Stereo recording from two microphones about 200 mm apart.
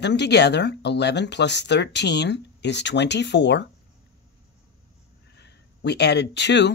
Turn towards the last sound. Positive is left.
turn(degrees=60)  # may be behind; listen again after turning